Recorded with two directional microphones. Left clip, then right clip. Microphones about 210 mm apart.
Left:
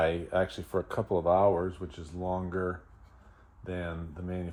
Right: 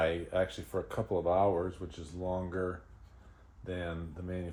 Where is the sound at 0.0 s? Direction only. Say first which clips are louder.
Left 3 dB; 30° left (ahead or behind).